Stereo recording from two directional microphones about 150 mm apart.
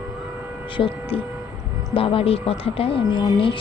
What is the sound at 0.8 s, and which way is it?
Speech, 35° left (ahead or behind).